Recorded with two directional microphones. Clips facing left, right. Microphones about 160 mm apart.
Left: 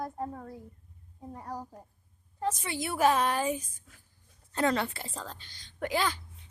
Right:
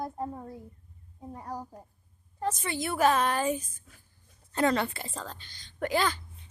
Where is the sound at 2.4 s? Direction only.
10° left (ahead or behind).